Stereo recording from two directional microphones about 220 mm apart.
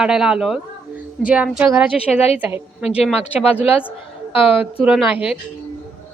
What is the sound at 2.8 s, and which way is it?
Speech, 30° left (ahead or behind).